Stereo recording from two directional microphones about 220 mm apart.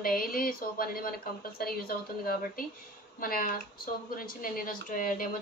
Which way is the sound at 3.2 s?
40° left (ahead or behind).